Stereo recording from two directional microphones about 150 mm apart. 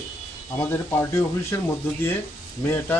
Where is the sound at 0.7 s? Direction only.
20° left (ahead or behind).